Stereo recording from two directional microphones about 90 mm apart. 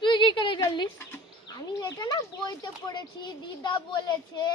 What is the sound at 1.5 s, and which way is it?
Speech, 45° left (ahead or behind).